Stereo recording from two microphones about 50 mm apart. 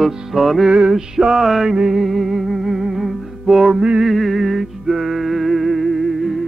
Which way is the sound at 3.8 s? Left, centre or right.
Centre.